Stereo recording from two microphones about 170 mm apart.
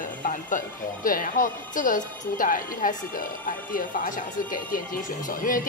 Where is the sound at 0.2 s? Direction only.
50° left (ahead or behind).